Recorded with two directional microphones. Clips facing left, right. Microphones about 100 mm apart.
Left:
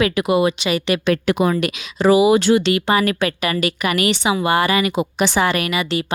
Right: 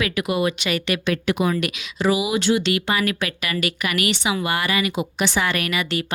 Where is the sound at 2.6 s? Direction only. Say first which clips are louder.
Left 5 dB; 35° left (ahead or behind).